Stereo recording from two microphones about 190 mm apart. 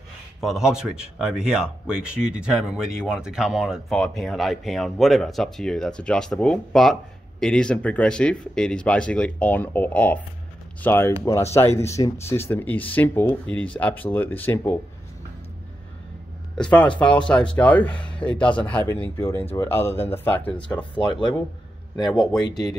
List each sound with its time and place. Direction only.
0.4 s speech: centre (ahead or behind)
16.5 s speech: 5° left (ahead or behind)
20.6 s speech: 25° left (ahead or behind)